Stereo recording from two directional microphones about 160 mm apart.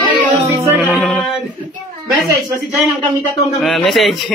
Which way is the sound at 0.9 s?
Centre (ahead or behind).